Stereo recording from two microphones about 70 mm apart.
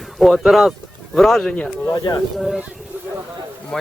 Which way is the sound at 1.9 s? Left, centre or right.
Left.